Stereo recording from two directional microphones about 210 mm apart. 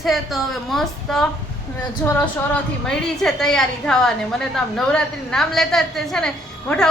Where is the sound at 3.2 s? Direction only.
5° left (ahead or behind).